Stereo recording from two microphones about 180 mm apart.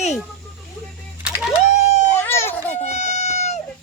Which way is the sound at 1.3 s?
5° right (ahead or behind).